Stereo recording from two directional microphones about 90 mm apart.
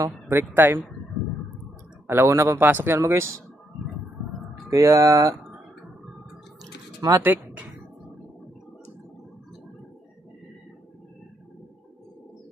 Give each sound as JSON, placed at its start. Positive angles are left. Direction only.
{"t": 0.0, "sound": "speech", "side_deg": -30}
{"t": 2.0, "sound": "speech", "side_deg": -30}
{"t": 4.7, "sound": "speech", "side_deg": -35}
{"t": 7.3, "sound": "a sound", "side_deg": -20}